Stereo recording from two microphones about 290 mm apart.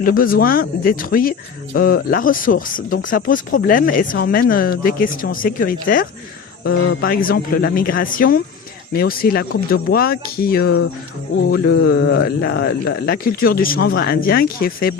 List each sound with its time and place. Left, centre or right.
0.0 s speech: left